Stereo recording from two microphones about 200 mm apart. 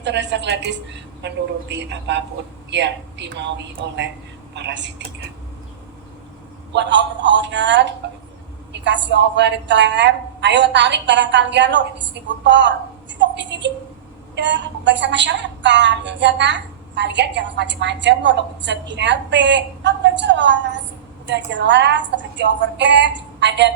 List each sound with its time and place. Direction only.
0.0 s a woman's voice: 60° right (ahead or behind)
6.7 s a woman's voice: 60° right (ahead or behind)